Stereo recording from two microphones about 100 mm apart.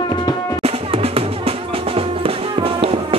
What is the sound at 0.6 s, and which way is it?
Music, 90° right.